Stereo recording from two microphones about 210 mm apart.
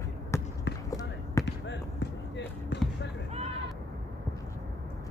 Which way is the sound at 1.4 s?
55° left (ahead or behind).